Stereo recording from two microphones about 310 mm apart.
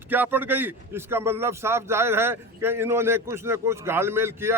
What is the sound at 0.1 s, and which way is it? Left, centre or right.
A man's voice, centre.